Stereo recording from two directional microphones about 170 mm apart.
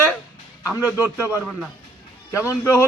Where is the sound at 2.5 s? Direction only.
15° left (ahead or behind).